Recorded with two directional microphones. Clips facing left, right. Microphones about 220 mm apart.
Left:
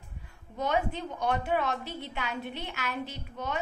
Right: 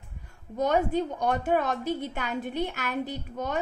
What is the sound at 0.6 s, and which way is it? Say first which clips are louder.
A woman's voice: right 5 dB; 45° right (ahead or behind).